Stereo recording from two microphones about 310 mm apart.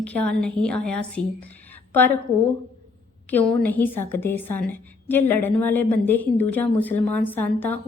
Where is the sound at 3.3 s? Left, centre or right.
Centre.